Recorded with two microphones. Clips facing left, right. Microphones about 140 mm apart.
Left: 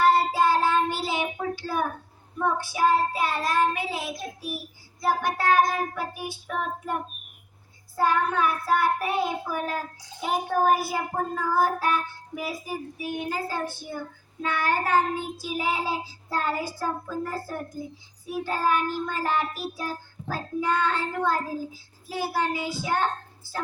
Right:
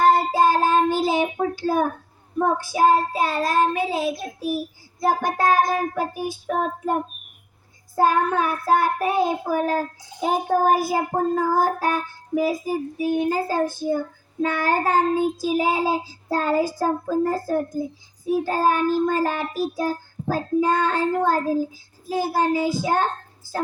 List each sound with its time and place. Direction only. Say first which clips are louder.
0.0 s child singing: right 4 dB; 45° right (ahead or behind)
3.2 s a child's voice: right 4 dB; 35° right (ahead or behind)
17.8 s child singing: right 9 dB; 45° right (ahead or behind)
18.3 s a child's voice: right 4 dB; 40° right (ahead or behind)